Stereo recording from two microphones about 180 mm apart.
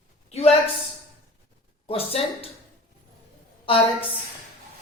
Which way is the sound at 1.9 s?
30° left (ahead or behind).